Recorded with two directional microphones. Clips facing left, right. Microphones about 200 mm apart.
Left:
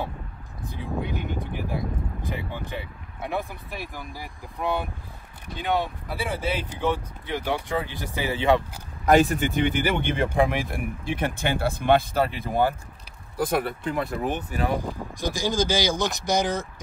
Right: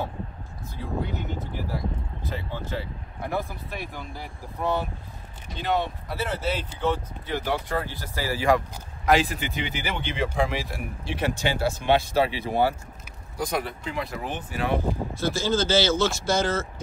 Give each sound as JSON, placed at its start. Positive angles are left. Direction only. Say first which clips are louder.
{"t": 0.7, "sound": "a sound", "louder": "even", "side_deg": 15}
{"t": 2.2, "sound": "speech", "louder": "right 2 dB", "side_deg": 15}
{"t": 3.7, "sound": "speech", "louder": "even", "side_deg": 0}
{"t": 4.6, "sound": "speech", "louder": "right 1 dB", "side_deg": 15}
{"t": 9.3, "sound": "speech", "louder": "left 8 dB", "side_deg": 50}
{"t": 15.1, "sound": "speech", "louder": "even", "side_deg": 15}